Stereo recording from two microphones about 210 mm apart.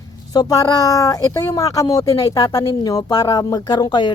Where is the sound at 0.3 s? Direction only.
20° left (ahead or behind).